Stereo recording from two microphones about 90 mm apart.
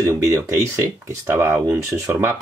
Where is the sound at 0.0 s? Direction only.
30° right (ahead or behind).